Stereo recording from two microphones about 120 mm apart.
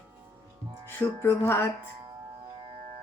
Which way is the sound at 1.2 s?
20° left (ahead or behind).